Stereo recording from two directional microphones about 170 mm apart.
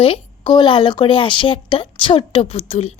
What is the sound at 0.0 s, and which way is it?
Speech, 30° left (ahead or behind).